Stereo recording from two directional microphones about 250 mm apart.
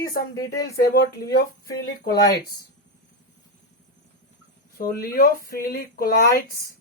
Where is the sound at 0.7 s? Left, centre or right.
Left.